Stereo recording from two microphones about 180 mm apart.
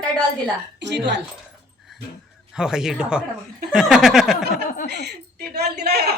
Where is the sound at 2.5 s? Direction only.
5° right (ahead or behind).